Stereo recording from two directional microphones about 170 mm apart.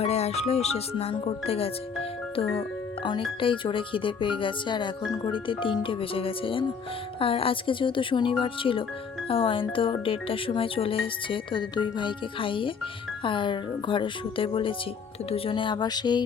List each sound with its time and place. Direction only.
0.0 s speech: 40° left (ahead or behind)